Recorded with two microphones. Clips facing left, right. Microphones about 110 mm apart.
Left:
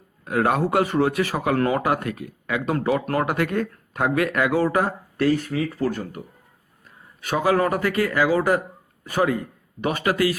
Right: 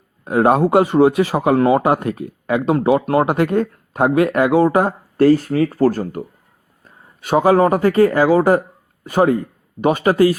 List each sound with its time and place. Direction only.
0.3 s speech: 25° right (ahead or behind)